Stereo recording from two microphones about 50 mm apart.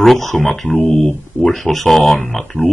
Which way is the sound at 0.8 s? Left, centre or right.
Left.